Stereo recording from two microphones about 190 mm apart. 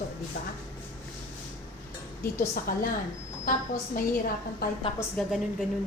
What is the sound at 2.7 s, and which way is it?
Speech, 50° left (ahead or behind).